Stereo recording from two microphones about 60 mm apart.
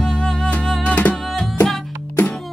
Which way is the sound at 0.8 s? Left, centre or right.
Left.